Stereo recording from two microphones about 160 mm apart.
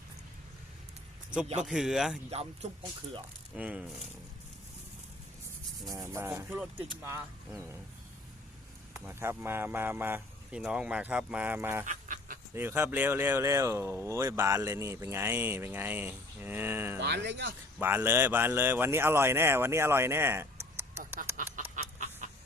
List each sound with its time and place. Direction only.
1.6 s speech: centre (ahead or behind)
2.3 s speech: 40° right (ahead or behind)
3.5 s speech: 5° right (ahead or behind)
5.9 s speech: 20° right (ahead or behind)
8.9 s speech: 15° right (ahead or behind)
11.9 s dog: 55° right (ahead or behind)
12.5 s speech: 15° right (ahead or behind)
17.0 s speech: 90° right
17.7 s speech: 15° right (ahead or behind)
21.3 s chicken: 55° right (ahead or behind)